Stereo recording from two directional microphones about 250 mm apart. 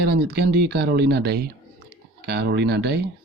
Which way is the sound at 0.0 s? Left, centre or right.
Right.